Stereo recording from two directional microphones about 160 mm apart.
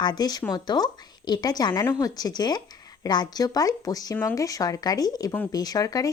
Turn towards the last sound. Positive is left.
turn(degrees=25)  # may be behind; listen again after turning